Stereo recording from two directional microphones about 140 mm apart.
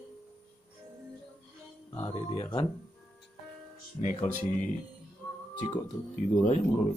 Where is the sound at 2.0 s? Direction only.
40° left (ahead or behind).